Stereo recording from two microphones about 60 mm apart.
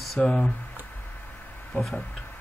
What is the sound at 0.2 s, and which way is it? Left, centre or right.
Speech, centre.